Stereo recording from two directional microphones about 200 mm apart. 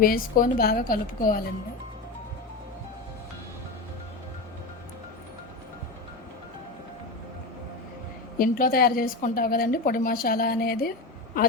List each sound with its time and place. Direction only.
0.0 s a woman's voice: 45° left (ahead or behind)
8.4 s a woman's voice: 45° left (ahead or behind)